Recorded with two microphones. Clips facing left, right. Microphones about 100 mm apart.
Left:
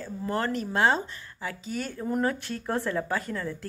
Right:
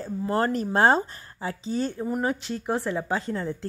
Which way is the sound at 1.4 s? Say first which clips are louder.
Right 5 dB; 30° right (ahead or behind).